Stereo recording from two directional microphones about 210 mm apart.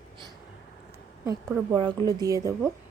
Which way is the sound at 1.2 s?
15° right (ahead or behind).